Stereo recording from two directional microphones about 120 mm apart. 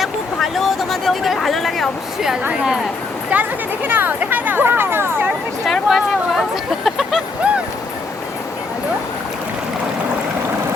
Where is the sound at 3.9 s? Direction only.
15° right (ahead or behind).